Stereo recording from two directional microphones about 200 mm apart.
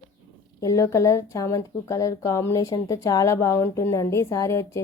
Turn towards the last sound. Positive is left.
turn(degrees=15)  # may be behind; listen again after turning